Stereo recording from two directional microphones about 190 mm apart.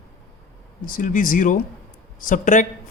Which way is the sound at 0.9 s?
45° left (ahead or behind).